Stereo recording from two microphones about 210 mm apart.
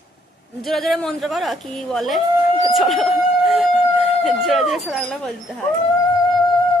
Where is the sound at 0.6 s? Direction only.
Centre (ahead or behind).